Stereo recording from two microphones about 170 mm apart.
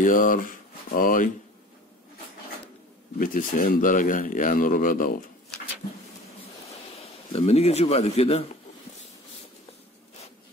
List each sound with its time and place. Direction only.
0.0 s speech: 55° left (ahead or behind)
3.2 s speech: 55° left (ahead or behind)
7.0 s speech: 35° left (ahead or behind)